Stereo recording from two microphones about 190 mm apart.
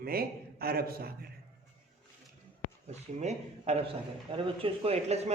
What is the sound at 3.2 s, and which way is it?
A man's voice, 35° right (ahead or behind).